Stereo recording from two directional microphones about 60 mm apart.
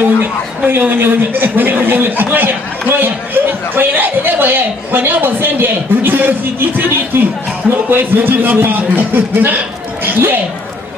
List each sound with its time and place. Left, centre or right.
0.7 s speech: right